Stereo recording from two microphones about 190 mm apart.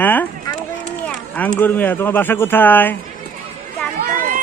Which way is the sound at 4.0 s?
45° right (ahead or behind).